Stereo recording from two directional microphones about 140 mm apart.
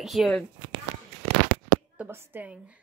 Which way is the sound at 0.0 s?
Centre (ahead or behind).